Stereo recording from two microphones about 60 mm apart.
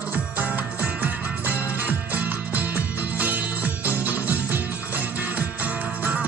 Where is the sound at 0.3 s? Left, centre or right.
Right.